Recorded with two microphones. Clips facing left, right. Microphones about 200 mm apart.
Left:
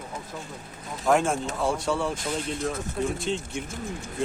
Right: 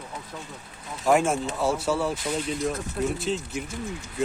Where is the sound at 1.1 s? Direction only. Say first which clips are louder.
Right 1 dB; 5° right (ahead or behind).